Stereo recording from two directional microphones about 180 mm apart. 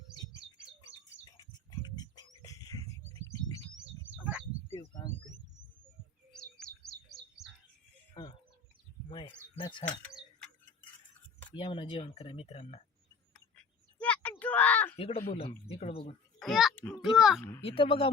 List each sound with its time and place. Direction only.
1.2 s bird: 25° left (ahead or behind)
4.1 s bird: 10° right (ahead or behind)
8.2 s chicken: 25° left (ahead or behind)
9.0 s a sound: 30° left (ahead or behind)
11.5 s speech: 30° left (ahead or behind)
13.3 s a sound: 5° left (ahead or behind)
14.9 s speech: 35° left (ahead or behind)
16.4 s a child's voice: centre (ahead or behind)
17.6 s speech: 30° left (ahead or behind)